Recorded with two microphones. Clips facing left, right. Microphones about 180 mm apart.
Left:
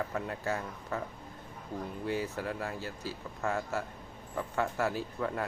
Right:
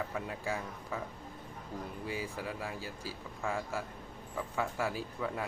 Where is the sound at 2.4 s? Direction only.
50° left (ahead or behind).